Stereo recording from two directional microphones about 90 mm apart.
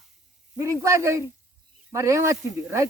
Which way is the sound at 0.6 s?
35° right (ahead or behind).